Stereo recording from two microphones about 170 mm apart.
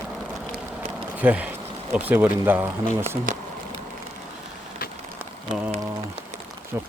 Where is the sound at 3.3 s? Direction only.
50° right (ahead or behind).